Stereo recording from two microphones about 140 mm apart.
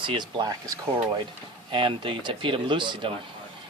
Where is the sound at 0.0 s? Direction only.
35° right (ahead or behind).